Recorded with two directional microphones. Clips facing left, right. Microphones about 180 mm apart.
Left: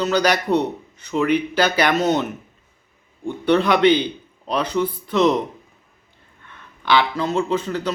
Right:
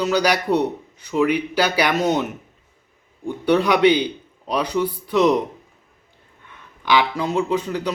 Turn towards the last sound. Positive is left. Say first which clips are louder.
# even
turn(degrees=-15)  # may be behind; listen again after turning